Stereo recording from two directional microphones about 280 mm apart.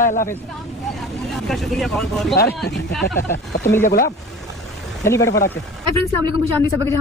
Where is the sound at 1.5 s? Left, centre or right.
Centre.